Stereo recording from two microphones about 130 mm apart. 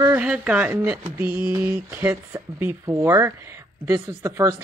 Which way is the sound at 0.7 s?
25° right (ahead or behind).